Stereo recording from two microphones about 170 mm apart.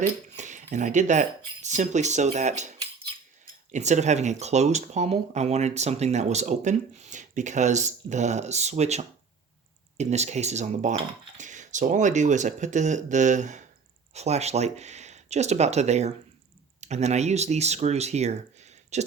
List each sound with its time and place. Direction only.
0.0 s speech: 45° right (ahead or behind)